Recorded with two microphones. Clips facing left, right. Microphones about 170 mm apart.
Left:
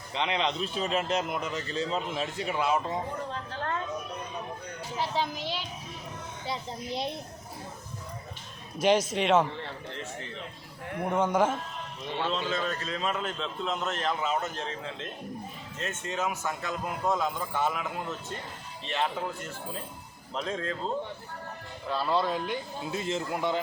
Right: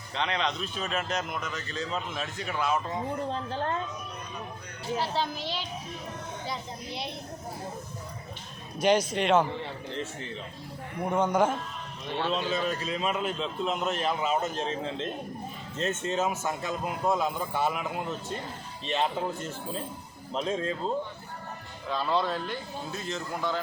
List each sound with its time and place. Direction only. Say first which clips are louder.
0.1 s a man's voice: left 1 dB; 20° left (ahead or behind)
4.9 s speech: even; 15° left (ahead or behind)
8.8 s a man's voice: even; centre (ahead or behind)
11.0 s a man's voice: right 1 dB; centre (ahead or behind)
12.2 s a man's voice: right 2 dB; 10° right (ahead or behind)
21.8 s speech: even; 5° left (ahead or behind)
22.9 s a man's voice: left 5 dB; 25° left (ahead or behind)